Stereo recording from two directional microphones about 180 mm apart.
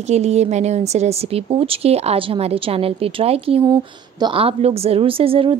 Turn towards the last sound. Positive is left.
turn(degrees=-30)  # may be behind; listen again after turning